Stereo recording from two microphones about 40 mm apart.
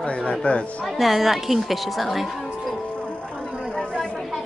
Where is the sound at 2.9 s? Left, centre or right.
Left.